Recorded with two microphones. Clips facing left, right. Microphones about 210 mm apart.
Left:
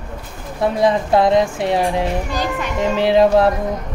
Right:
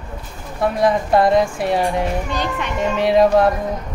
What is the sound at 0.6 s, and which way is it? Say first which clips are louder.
Speech: left 1 dB; 25° left (ahead or behind).